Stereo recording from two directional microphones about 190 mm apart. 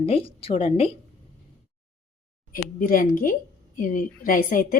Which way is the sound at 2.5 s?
50° left (ahead or behind).